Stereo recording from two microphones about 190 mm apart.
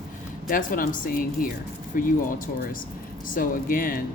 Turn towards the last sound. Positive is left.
turn(degrees=45)  # may be behind; listen again after turning